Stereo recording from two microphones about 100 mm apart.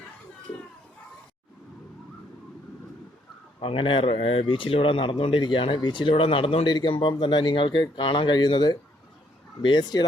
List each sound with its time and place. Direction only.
3.6 s speech: 60° left (ahead or behind)
6.7 s speech: 55° left (ahead or behind)